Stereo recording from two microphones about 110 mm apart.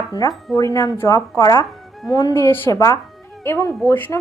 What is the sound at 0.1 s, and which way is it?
A woman's voice, 35° left (ahead or behind).